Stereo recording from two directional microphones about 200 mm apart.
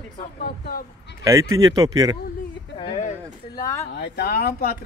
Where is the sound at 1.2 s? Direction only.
15° right (ahead or behind).